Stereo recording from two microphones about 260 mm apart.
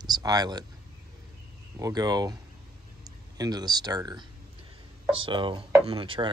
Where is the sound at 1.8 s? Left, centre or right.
Centre.